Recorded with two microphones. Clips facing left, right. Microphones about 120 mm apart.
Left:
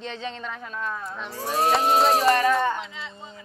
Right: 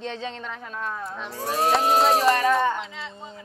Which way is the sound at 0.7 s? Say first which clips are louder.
Right 1 dB; 5° right (ahead or behind).